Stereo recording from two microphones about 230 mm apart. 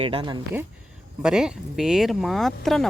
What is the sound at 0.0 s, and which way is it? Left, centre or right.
Speech, right.